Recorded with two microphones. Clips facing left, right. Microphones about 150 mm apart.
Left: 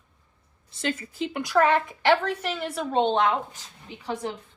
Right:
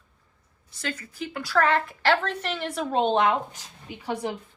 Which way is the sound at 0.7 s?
25° left (ahead or behind).